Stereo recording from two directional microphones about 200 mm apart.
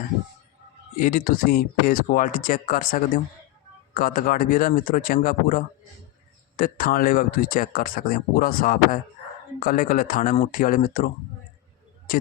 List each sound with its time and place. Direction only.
0.9 s speech: 45° left (ahead or behind)